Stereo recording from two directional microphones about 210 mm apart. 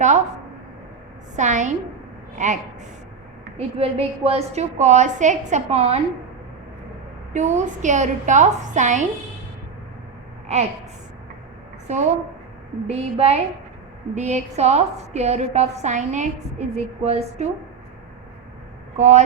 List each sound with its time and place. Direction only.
1.4 s a woman's voice: 35° right (ahead or behind)
3.6 s a woman's voice: 30° right (ahead or behind)
7.3 s a woman's voice: 35° right (ahead or behind)
11.9 s a woman's voice: 30° right (ahead or behind)
18.9 s a woman's voice: 35° right (ahead or behind)